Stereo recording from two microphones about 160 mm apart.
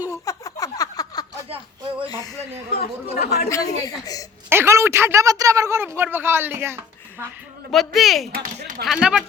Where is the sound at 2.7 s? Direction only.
70° left (ahead or behind).